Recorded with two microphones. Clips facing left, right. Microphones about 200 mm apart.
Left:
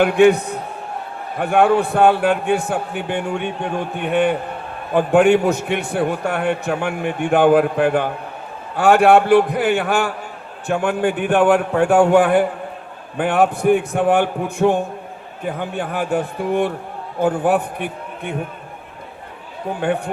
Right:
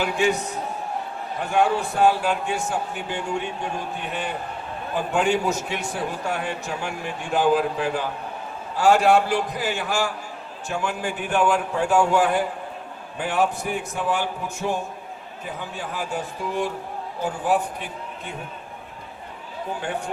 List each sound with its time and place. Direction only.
0.0 s a man's voice: 60° left (ahead or behind)